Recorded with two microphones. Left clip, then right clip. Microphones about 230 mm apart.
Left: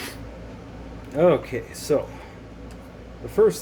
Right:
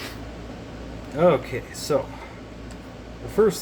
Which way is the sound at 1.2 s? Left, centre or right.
Left.